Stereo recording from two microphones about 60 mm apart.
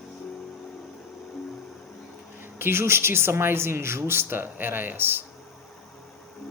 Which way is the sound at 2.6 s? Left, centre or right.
Right.